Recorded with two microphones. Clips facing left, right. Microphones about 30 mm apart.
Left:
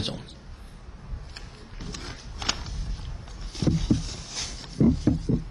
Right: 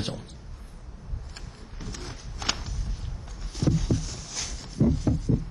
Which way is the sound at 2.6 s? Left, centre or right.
Left.